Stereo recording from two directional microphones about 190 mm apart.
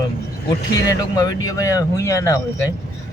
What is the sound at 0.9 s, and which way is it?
Speech, 20° left (ahead or behind).